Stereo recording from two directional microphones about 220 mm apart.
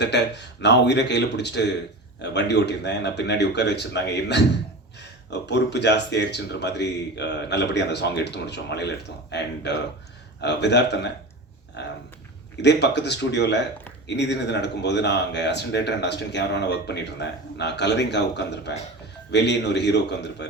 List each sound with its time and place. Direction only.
0.0 s speech: 50° left (ahead or behind)
12.6 s speech: 50° left (ahead or behind)